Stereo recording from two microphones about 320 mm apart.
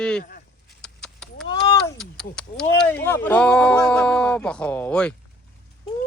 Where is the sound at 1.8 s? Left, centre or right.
Centre.